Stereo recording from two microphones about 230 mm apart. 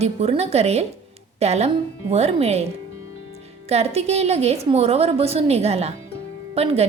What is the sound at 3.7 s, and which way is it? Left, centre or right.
Speech, right.